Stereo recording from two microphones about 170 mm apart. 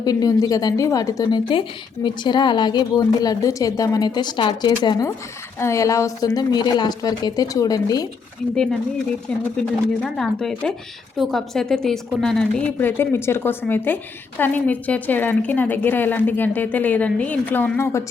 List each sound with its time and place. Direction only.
0.0 s a woman's voice: 20° left (ahead or behind)
8.5 s speech: 5° left (ahead or behind)
10.0 s a woman's voice: 5° left (ahead or behind)